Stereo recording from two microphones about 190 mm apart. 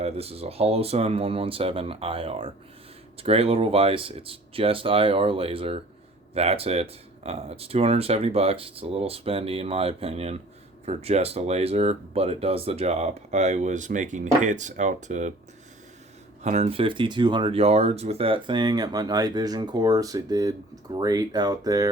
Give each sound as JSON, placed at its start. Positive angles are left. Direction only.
{"t": 0.0, "sound": "speech", "side_deg": -30}
{"t": 16.4, "sound": "speech", "side_deg": -35}